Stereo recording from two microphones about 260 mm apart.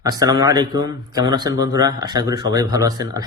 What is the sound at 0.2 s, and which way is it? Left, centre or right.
Speech, centre.